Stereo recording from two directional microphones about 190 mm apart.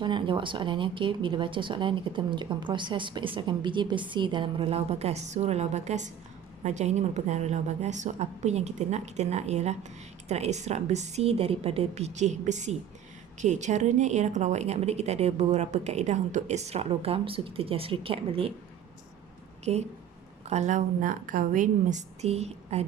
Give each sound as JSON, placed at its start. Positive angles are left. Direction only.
{"t": 0.0, "sound": "a woman's voice", "side_deg": -25}
{"t": 19.7, "sound": "a woman's voice", "side_deg": -35}